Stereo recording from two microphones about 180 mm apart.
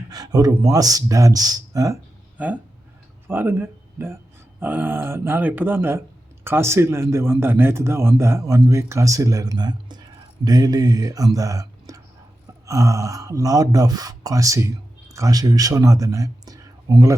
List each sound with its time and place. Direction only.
0.1 s speech: 20° right (ahead or behind)
3.2 s a man's voice: 10° right (ahead or behind)